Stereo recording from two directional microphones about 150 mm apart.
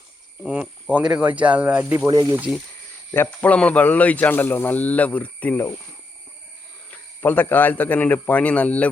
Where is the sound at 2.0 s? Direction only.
25° right (ahead or behind).